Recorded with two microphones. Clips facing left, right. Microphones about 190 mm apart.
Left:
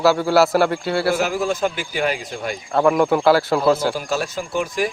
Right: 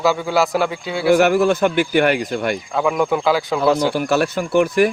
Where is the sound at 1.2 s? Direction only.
65° right (ahead or behind).